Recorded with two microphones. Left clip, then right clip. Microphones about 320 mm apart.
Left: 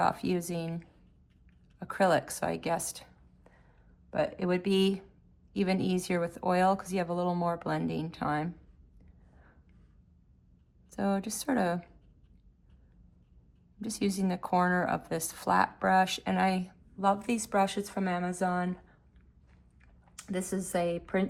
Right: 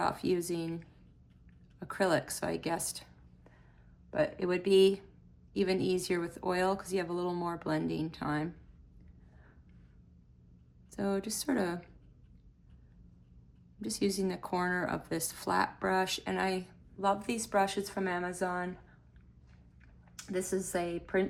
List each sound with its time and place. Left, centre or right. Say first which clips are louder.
0.0 s a woman's voice: left 2 dB; left
10.9 s speech: left 2 dB; left
13.8 s speech: even; left
20.1 s speech: right 1 dB; left